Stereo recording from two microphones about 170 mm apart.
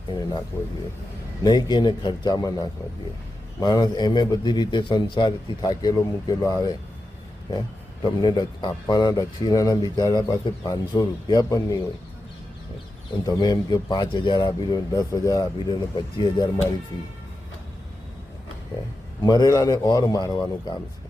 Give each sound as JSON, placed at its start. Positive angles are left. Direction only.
{"t": 0.1, "sound": "a man's voice", "side_deg": 25}
{"t": 1.5, "sound": "a man's voice", "side_deg": 25}
{"t": 13.2, "sound": "a man's voice", "side_deg": 25}
{"t": 19.2, "sound": "a man's voice", "side_deg": 25}